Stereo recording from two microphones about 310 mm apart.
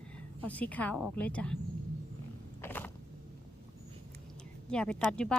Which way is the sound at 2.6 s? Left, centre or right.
Centre.